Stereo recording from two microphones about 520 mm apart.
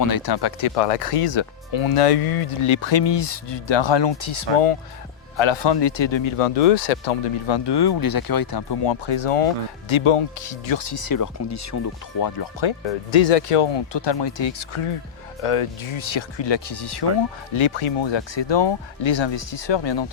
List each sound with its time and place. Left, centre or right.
0.0 s speech: left
0.6 s speech: left
5.4 s speech: left
13.2 s speech: left
17.5 s speech: left